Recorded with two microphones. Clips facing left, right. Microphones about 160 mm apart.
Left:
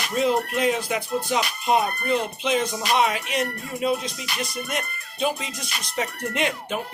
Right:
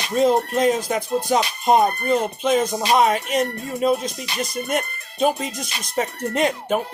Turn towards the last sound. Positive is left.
turn(degrees=-40)  # may be behind; listen again after turning